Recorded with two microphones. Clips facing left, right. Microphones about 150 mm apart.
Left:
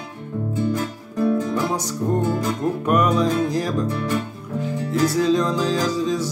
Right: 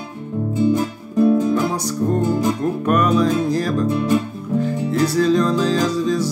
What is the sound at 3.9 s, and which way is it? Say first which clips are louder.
Speech: right 6 dB; 20° right (ahead or behind).